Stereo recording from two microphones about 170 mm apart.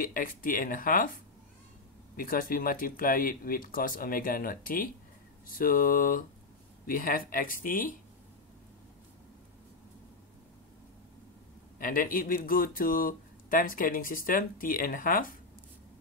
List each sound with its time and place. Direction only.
0.0 s speech: 55° left (ahead or behind)
11.8 s speech: 55° left (ahead or behind)